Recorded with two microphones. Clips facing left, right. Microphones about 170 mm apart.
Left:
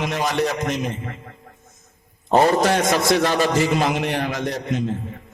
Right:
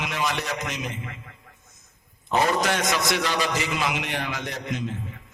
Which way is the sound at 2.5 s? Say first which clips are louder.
Left 6 dB; 45° left (ahead or behind).